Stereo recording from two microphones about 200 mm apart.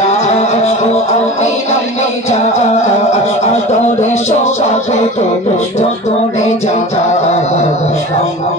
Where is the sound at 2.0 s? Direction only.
35° left (ahead or behind).